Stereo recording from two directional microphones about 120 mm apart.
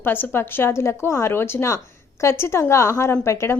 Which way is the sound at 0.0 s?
15° left (ahead or behind).